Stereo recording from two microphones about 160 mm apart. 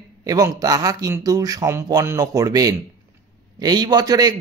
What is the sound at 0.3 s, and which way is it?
Speech, 20° right (ahead or behind).